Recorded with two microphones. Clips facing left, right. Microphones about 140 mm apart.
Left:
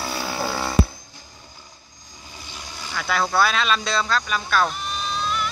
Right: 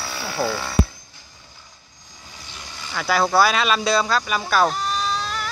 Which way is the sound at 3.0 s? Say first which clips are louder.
Right 3 dB; 5° right (ahead or behind).